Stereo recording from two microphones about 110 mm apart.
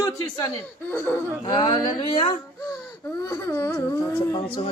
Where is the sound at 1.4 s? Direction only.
40° left (ahead or behind).